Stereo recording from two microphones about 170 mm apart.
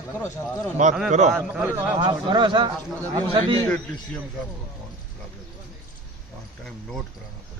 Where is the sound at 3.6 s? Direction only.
20° left (ahead or behind).